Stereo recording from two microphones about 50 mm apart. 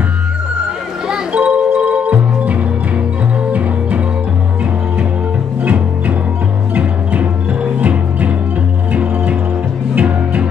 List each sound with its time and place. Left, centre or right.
1.3 s music: right
5.6 s music: right